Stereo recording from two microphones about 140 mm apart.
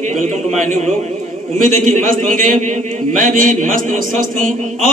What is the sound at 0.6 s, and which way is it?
Chant, 60° right (ahead or behind).